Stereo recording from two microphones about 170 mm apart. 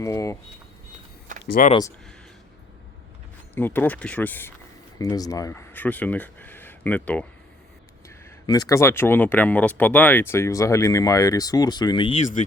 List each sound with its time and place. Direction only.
0.0 s speech: 20° left (ahead or behind)
1.6 s speech: 55° left (ahead or behind)
3.5 s speech: 10° left (ahead or behind)
4.9 s speech: 20° left (ahead or behind)
8.0 s speech: 20° left (ahead or behind)